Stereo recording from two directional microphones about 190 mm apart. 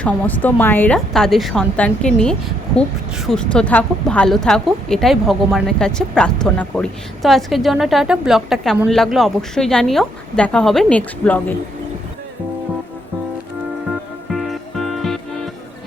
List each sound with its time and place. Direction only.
0.0 s a woman's voice: 10° left (ahead or behind)
14.3 s music: centre (ahead or behind)